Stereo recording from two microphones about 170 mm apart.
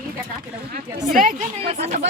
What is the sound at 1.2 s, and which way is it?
Speech, 55° right (ahead or behind).